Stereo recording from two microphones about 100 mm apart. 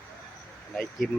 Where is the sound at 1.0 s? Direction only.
5° left (ahead or behind).